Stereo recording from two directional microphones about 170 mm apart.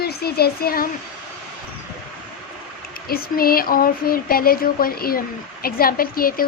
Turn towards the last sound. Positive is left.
turn(degrees=60)  # may be behind; listen again after turning